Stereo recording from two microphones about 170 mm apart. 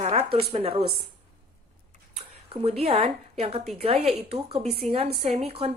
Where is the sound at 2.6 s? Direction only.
35° right (ahead or behind).